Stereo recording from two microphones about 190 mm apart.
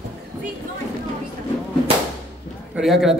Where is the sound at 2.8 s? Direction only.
Centre (ahead or behind).